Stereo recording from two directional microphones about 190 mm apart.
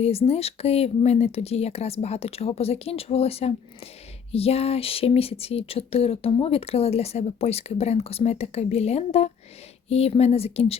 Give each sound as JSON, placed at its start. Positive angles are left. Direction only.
{"t": 0.0, "sound": "speech", "side_deg": 35}